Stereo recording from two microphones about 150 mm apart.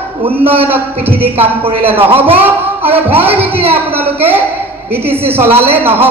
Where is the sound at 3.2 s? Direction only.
10° right (ahead or behind).